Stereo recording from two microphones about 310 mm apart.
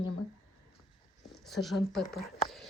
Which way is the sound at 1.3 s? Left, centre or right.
Centre.